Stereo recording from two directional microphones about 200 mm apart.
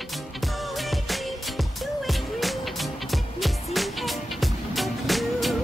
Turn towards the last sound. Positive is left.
turn(degrees=0)  # may be behind; listen again after turning